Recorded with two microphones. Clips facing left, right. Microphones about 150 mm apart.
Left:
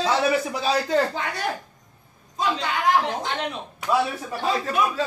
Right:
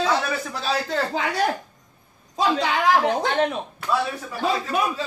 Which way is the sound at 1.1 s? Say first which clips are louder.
Right 5 dB; 90° right.